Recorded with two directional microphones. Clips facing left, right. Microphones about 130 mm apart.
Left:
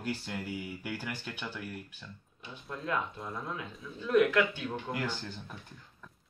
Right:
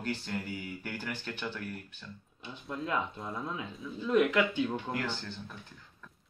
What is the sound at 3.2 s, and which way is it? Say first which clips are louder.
Speech: right 1 dB; centre (ahead or behind).